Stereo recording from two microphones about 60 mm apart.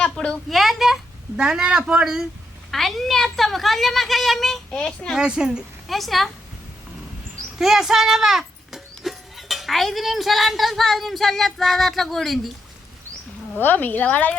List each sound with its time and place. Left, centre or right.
0.0 s speech: centre
0.5 s speech: centre
1.4 s speech: centre
2.7 s speech: centre
5.1 s speech: centre
5.9 s speech: centre
7.6 s speech: centre
13.6 s a woman's voice: left